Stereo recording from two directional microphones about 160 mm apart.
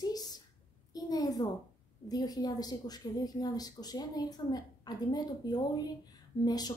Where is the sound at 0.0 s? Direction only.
25° left (ahead or behind).